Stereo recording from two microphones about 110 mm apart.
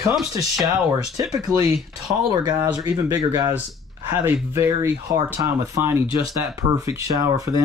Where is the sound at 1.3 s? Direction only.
35° right (ahead or behind).